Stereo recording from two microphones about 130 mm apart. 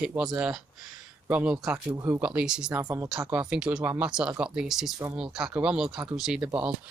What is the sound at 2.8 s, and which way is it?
Speech, 25° right (ahead or behind).